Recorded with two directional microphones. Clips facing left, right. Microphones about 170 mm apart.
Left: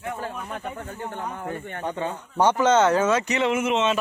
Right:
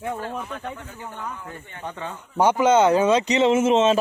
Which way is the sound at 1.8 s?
30° left (ahead or behind).